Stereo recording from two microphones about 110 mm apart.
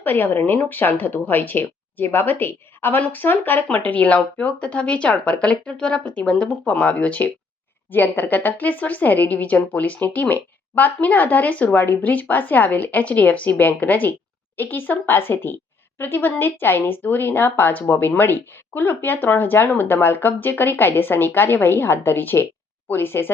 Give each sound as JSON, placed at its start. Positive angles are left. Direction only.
{"t": 0.0, "sound": "a woman's voice", "side_deg": 20}